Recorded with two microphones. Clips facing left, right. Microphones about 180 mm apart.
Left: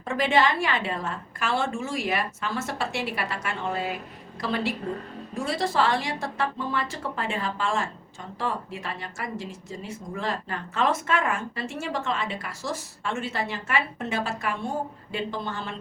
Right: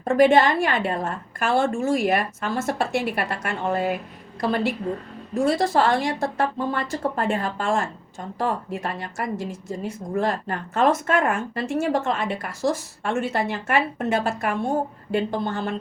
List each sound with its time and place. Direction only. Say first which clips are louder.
0.0 s speech: right 7 dB; 50° right (ahead or behind)